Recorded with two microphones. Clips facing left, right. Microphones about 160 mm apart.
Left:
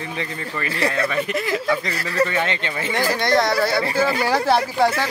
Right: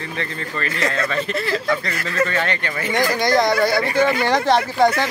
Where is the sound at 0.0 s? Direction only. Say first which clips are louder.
Even; 15° left (ahead or behind).